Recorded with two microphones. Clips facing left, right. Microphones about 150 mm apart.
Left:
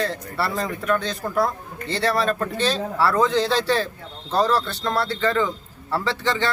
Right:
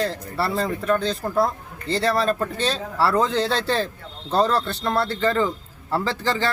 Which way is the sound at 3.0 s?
30° right (ahead or behind).